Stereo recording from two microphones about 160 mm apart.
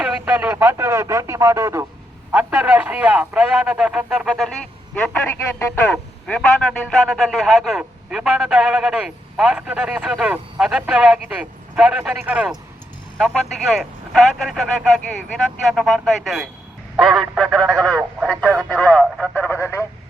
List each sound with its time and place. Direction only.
0.0 s a man's voice: 10° right (ahead or behind); by 19.8 s 15° left (ahead or behind)